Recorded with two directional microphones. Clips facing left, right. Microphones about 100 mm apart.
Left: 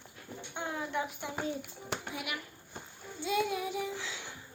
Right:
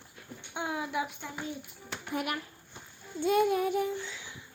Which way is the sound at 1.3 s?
35° left (ahead or behind).